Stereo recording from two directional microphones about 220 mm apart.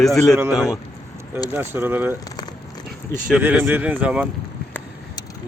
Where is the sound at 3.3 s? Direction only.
5° right (ahead or behind).